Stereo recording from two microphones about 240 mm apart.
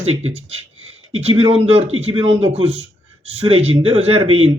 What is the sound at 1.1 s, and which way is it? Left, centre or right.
A man's voice, right.